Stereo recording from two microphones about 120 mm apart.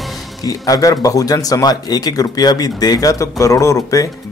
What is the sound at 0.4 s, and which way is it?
A man's voice, 30° left (ahead or behind).